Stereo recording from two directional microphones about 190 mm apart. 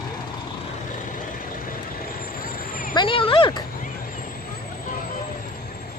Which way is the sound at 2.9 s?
25° left (ahead or behind).